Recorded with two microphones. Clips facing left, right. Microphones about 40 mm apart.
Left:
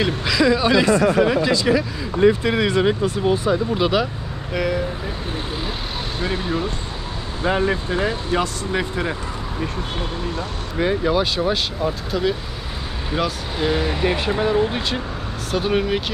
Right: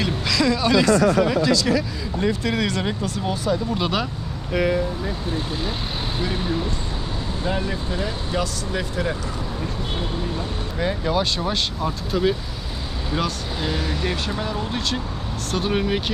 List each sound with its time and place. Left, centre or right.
0.0 s speech: centre
3.8 s speech: centre
6.2 s speech: left
7.6 s speech: left
10.8 s speech: centre
15.5 s speech: centre